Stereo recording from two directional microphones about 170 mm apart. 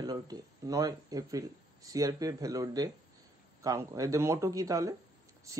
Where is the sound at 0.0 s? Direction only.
25° right (ahead or behind).